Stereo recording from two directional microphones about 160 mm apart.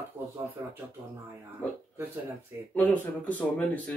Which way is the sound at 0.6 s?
20° right (ahead or behind).